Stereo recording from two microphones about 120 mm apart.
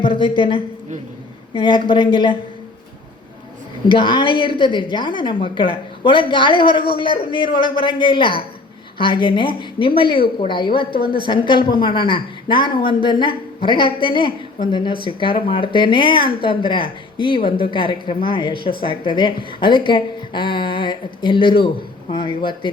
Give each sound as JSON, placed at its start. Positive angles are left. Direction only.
{"t": 0.0, "sound": "a woman's voice", "side_deg": 45}
{"t": 3.8, "sound": "a woman's voice", "side_deg": 40}